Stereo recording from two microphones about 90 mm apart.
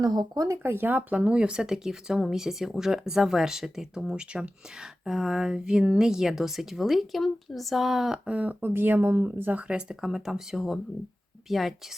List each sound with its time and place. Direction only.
0.0 s speech: 50° right (ahead or behind)
0.4 s speech: 30° right (ahead or behind); by 11.9 s centre (ahead or behind)